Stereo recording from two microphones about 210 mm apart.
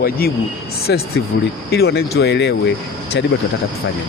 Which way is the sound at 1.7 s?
50° left (ahead or behind).